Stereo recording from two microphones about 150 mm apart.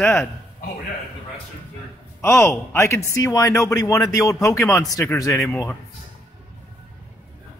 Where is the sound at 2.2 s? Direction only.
20° left (ahead or behind).